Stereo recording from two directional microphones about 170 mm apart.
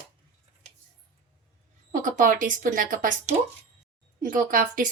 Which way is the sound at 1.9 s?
50° right (ahead or behind).